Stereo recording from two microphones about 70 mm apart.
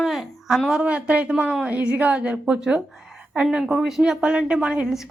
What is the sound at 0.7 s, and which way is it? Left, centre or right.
A woman's voice, centre.